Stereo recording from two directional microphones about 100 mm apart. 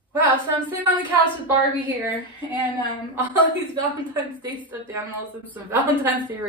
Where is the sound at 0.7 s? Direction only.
15° right (ahead or behind).